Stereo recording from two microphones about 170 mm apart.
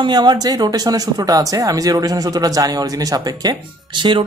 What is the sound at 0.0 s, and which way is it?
Speech, 25° right (ahead or behind).